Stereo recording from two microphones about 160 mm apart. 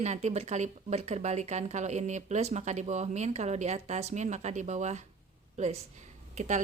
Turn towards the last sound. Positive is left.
turn(degrees=-50)  # may be behind; listen again after turning